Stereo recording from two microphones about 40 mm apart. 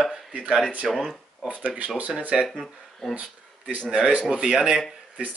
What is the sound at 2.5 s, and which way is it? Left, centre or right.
Speech, centre.